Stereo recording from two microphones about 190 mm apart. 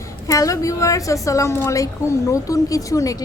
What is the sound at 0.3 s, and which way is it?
A woman's voice, 15° left (ahead or behind).